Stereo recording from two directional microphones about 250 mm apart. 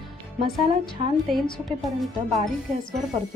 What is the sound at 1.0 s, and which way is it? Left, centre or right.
Speech, right.